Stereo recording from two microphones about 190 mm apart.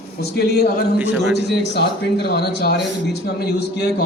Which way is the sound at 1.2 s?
60° left (ahead or behind).